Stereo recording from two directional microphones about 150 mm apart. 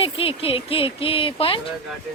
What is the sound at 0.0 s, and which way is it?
Speech, 40° left (ahead or behind).